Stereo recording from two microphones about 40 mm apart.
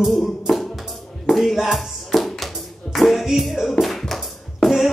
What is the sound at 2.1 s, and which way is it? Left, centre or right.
Music, centre.